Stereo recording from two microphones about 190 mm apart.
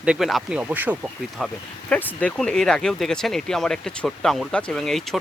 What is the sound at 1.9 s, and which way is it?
Speech, 5° left (ahead or behind).